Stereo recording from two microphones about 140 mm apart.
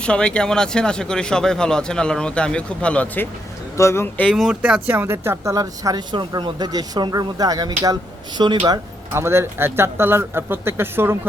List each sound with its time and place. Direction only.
0.0 s speech: 5° left (ahead or behind)
4.3 s speech: 5° right (ahead or behind); by 8.8 s 30° right (ahead or behind)
9.1 s speech: 20° right (ahead or behind)